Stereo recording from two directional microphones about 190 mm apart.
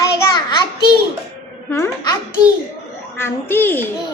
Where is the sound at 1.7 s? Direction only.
15° left (ahead or behind).